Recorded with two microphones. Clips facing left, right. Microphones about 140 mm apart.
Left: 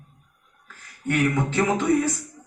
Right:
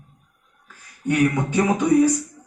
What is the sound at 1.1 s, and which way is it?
Speech, 15° right (ahead or behind).